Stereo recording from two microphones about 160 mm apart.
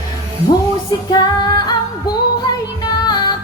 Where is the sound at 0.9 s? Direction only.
25° left (ahead or behind).